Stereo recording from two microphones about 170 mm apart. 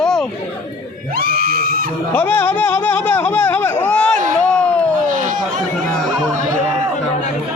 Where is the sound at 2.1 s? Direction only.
10° left (ahead or behind).